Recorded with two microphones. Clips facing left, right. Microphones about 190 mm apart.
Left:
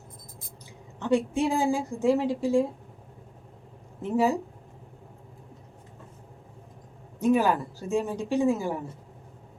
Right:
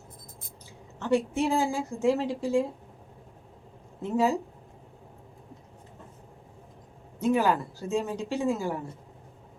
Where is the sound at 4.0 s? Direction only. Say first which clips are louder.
Left 1 dB; 15° left (ahead or behind).